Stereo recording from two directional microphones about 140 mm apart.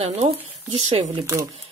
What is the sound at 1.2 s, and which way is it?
Speech, 20° right (ahead or behind).